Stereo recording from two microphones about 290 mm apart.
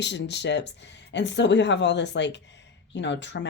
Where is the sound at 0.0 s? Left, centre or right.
Left.